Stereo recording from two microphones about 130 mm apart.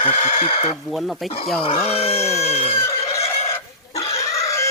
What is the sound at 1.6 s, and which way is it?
Speech, 50° left (ahead or behind).